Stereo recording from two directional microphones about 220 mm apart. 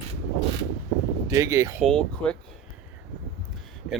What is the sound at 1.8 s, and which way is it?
Speech, 5° left (ahead or behind).